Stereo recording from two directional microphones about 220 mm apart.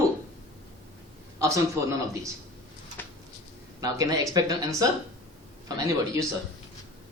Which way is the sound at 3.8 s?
15° right (ahead or behind).